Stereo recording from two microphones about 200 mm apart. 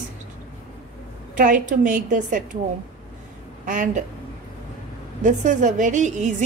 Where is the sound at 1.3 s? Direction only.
40° right (ahead or behind).